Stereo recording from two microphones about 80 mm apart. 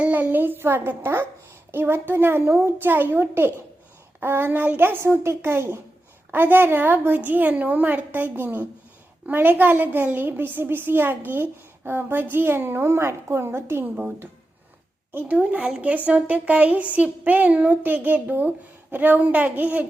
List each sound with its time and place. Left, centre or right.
0.0 s a child's voice: right
15.1 s speech: right